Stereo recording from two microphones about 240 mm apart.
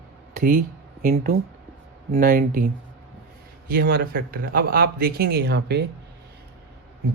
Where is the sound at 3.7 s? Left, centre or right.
Right.